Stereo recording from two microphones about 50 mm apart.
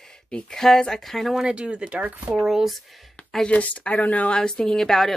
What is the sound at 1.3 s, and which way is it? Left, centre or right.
Speech, centre.